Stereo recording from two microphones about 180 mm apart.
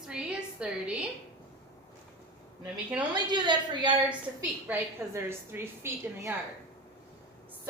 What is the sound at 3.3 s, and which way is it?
Speech, 25° right (ahead or behind).